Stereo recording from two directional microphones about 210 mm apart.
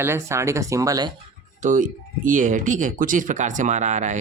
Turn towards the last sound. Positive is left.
turn(degrees=-35)  # may be behind; listen again after turning